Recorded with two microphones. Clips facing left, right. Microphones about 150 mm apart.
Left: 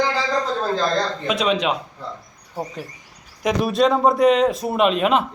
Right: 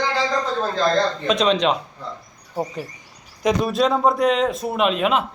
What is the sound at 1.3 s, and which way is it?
Speech, 5° left (ahead or behind).